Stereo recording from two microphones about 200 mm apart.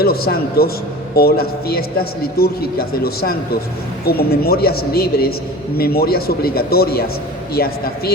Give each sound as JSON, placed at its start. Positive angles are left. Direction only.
{"t": 0.0, "sound": "a man's voice", "side_deg": 50}